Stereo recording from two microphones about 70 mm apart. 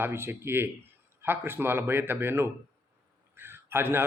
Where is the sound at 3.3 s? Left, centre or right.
Right.